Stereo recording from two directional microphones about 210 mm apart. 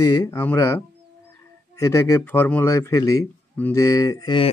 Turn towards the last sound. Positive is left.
turn(degrees=20)  # may be behind; listen again after turning